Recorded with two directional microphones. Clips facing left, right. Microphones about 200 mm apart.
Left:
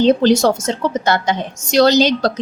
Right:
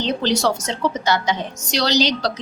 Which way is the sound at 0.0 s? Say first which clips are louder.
Left 8 dB; 50° left (ahead or behind).